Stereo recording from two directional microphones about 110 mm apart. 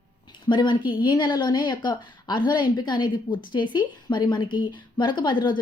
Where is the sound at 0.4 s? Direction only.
45° left (ahead or behind).